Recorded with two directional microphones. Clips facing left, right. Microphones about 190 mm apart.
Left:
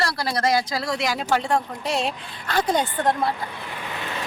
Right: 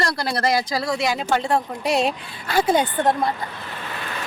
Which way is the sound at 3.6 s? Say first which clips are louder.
Even; 15° left (ahead or behind).